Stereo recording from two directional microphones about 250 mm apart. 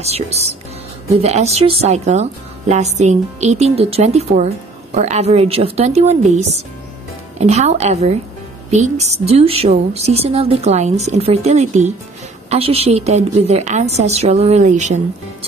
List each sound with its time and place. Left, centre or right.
0.0 s speech: right